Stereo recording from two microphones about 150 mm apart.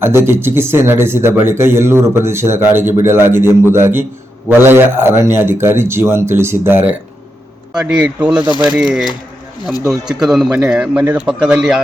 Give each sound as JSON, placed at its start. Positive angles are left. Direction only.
{"t": 0.0, "sound": "a man's voice", "side_deg": -15}